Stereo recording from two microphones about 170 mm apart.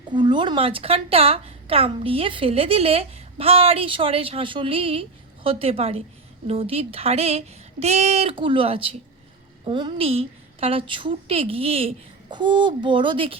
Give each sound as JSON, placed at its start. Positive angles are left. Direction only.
{"t": 0.1, "sound": "a woman's voice", "side_deg": -25}